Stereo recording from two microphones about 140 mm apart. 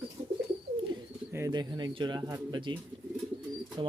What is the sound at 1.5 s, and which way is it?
Speech, 30° right (ahead or behind).